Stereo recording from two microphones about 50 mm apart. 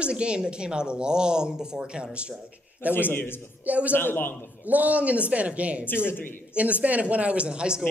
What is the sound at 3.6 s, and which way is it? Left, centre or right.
Speech, right.